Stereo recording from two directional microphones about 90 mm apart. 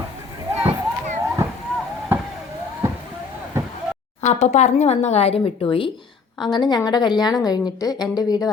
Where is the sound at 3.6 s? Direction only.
30° right (ahead or behind).